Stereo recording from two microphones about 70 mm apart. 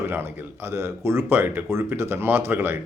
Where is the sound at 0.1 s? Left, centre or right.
Right.